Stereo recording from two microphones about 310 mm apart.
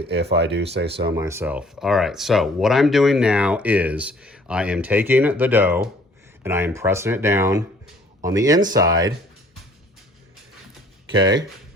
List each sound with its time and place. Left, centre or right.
0.1 s speech: right
1.1 s speech: centre
11.2 s speech: centre